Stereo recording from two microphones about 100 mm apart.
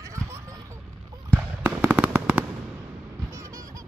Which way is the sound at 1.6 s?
10° right (ahead or behind).